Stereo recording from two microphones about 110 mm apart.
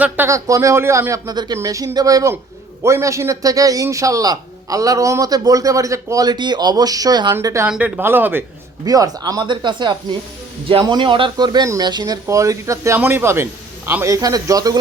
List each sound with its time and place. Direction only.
0.3 s a man's voice: 30° right (ahead or behind)
7.4 s a man's voice: 25° right (ahead or behind)
7.7 s speech: 10° right (ahead or behind)
8.8 s a man's voice: 35° right (ahead or behind)